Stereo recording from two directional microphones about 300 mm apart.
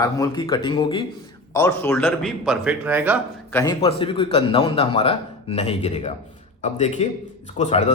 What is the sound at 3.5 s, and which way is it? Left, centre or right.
A man's voice, centre.